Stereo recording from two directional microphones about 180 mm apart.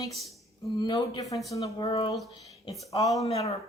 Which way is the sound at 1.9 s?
30° left (ahead or behind).